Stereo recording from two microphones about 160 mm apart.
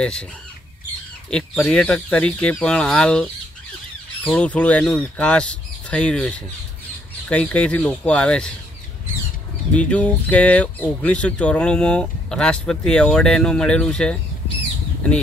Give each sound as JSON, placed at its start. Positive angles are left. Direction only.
{"t": 0.0, "sound": "speech", "side_deg": 5}
{"t": 1.3, "sound": "speech", "side_deg": 5}
{"t": 9.8, "sound": "speech", "side_deg": 5}